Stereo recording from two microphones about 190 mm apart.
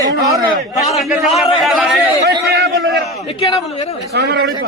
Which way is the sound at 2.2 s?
65° right (ahead or behind).